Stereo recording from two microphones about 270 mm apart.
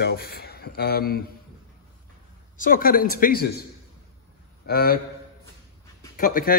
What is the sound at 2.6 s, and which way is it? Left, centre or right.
Speech, left.